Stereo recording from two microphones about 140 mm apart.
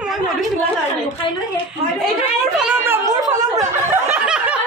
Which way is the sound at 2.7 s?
15° right (ahead or behind).